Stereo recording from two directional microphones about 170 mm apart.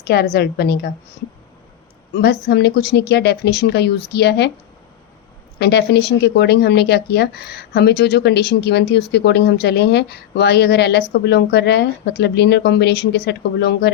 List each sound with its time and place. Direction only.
0.0 s speech: 70° left (ahead or behind)
2.1 s speech: 75° left (ahead or behind)
5.5 s speech: 75° left (ahead or behind)